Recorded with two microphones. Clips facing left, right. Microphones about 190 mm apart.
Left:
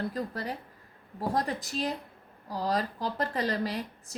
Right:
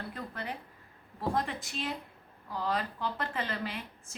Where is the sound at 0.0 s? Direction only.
35° left (ahead or behind).